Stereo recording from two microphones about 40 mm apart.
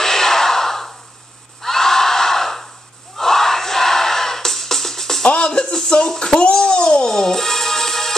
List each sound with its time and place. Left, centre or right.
0.0 s a sound: centre
1.6 s crowd: centre
3.2 s music: centre
5.2 s music: left